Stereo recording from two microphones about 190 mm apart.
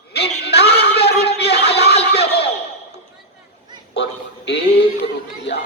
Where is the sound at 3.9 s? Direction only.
65° left (ahead or behind).